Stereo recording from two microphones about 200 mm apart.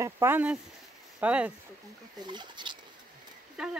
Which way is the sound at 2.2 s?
20° right (ahead or behind).